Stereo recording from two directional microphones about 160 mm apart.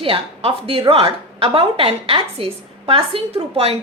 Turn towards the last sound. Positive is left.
turn(degrees=-40)  # may be behind; listen again after turning